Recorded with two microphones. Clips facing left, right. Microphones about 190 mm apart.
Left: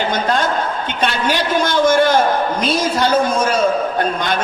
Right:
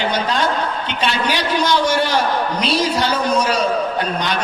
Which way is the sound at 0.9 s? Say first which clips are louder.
Left 2 dB; 50° left (ahead or behind).